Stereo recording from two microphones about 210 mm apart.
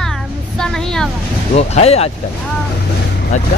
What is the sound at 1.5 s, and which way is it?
Speech, 30° left (ahead or behind).